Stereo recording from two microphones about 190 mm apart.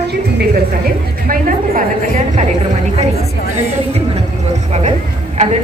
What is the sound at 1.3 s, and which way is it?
Speech, 45° right (ahead or behind).